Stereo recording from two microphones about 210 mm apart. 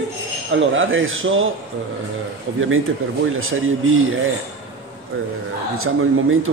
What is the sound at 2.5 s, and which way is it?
Speech, 70° right (ahead or behind).